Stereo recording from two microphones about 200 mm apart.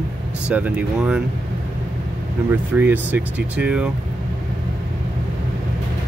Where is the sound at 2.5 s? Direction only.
10° right (ahead or behind).